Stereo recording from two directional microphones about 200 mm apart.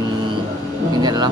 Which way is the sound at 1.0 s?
20° right (ahead or behind).